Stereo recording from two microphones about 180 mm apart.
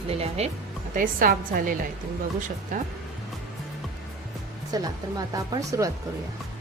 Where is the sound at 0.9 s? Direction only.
50° right (ahead or behind).